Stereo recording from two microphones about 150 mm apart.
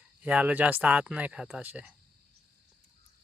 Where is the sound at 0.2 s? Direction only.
10° right (ahead or behind).